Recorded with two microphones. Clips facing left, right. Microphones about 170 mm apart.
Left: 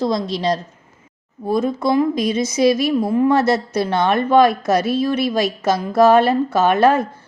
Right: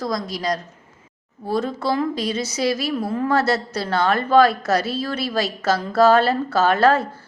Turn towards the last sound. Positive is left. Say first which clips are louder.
# left 2 dB
turn(degrees=15)  # may be behind; listen again after turning